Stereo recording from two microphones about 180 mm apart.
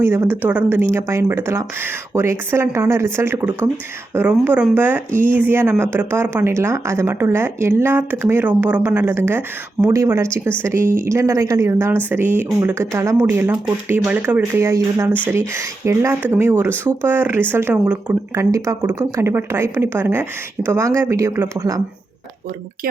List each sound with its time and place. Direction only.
0.0 s speech: 15° right (ahead or behind)